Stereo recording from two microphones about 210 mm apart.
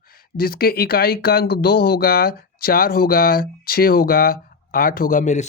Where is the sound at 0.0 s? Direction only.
45° left (ahead or behind).